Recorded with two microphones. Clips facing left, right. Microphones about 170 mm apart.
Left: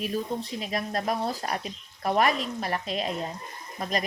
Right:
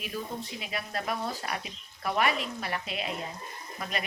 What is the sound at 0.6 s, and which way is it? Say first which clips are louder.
Speech: left 5 dB; 40° left (ahead or behind).